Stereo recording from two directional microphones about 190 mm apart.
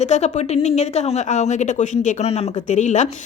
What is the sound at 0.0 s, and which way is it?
A woman's voice, 35° left (ahead or behind).